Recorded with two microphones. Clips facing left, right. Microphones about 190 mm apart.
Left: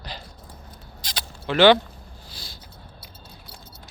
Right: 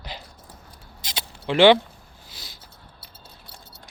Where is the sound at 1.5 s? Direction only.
25° right (ahead or behind).